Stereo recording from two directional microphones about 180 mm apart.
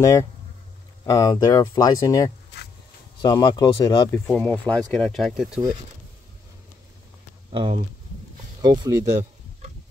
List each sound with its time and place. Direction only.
0.0 s speech: 15° left (ahead or behind)
4.1 s speech: 10° left (ahead or behind)
7.5 s speech: 30° right (ahead or behind)